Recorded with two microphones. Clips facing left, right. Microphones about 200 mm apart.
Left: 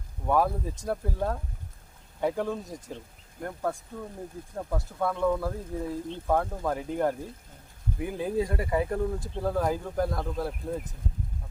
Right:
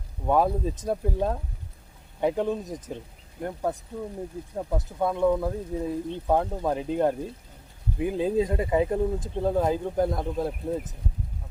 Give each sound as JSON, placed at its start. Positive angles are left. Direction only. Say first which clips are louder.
{"t": 0.3, "sound": "speech", "louder": "right 3 dB", "side_deg": -20}